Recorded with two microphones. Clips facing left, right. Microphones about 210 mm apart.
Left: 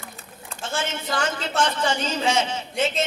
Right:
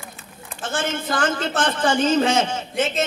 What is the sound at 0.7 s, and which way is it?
A man's voice, 50° right (ahead or behind).